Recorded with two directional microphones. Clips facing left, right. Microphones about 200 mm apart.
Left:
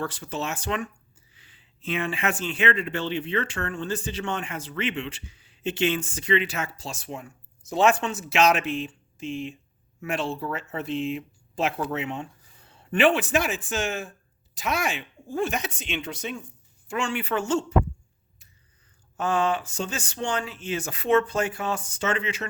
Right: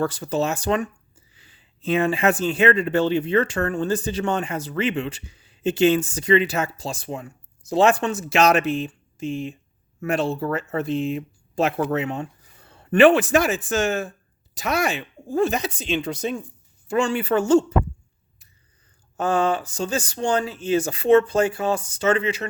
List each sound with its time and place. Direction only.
0.0 s speech: 40° right (ahead or behind)
19.1 s speech: 35° right (ahead or behind)